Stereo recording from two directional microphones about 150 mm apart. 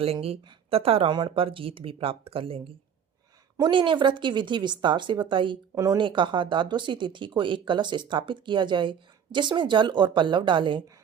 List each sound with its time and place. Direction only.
0.0 s speech: 40° right (ahead or behind)